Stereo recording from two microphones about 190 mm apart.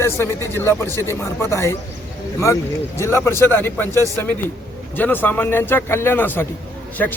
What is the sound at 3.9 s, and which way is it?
Speech, 15° right (ahead or behind).